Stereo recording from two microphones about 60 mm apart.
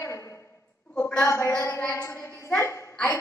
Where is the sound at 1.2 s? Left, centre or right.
Left.